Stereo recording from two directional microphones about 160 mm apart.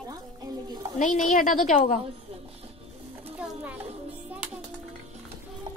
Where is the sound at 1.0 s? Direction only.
55° left (ahead or behind).